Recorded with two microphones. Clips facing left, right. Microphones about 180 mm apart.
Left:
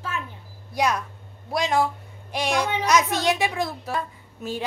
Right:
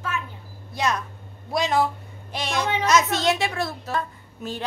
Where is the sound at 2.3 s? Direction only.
10° left (ahead or behind).